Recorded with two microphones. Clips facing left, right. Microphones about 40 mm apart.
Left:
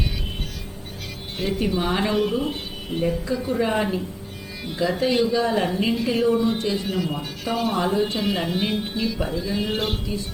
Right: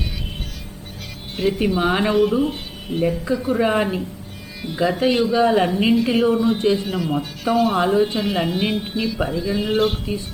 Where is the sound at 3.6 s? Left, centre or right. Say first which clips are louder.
Right 3 dB; right.